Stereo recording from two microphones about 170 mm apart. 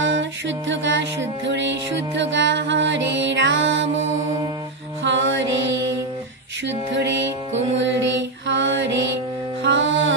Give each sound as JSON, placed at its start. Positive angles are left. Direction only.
{"t": 0.0, "sound": "music", "side_deg": -90}
{"t": 5.0, "sound": "music", "side_deg": -90}
{"t": 7.5, "sound": "music", "side_deg": -90}
{"t": 8.5, "sound": "mantra", "side_deg": -90}
{"t": 9.6, "sound": "music", "side_deg": -90}